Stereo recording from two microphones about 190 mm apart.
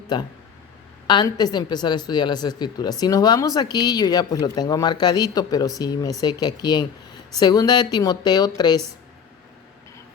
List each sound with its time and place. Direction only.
0.1 s a woman's voice: 25° left (ahead or behind)